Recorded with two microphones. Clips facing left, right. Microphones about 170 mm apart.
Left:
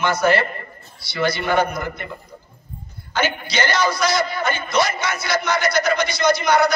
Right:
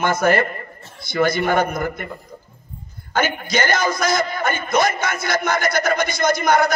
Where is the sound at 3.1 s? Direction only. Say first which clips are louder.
Right 2 dB; 50° right (ahead or behind).